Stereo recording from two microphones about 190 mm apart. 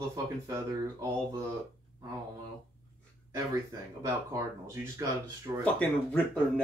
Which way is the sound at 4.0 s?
15° right (ahead or behind).